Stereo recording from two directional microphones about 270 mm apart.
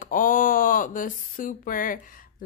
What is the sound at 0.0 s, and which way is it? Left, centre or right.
Speech, left.